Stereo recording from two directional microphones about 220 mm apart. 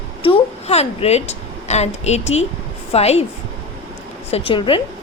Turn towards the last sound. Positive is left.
turn(degrees=25)  # may be behind; listen again after turning